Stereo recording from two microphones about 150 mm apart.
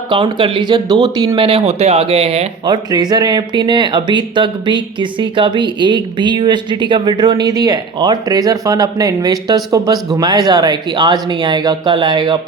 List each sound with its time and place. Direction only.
0.1 s speech: 35° right (ahead or behind)
2.6 s speech: 30° right (ahead or behind)